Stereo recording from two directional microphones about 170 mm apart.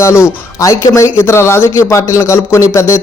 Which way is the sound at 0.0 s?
15° left (ahead or behind).